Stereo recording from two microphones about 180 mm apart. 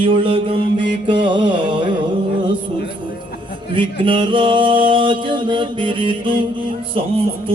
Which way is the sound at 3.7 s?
30° right (ahead or behind).